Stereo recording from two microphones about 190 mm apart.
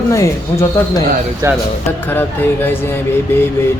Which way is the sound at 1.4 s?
15° right (ahead or behind).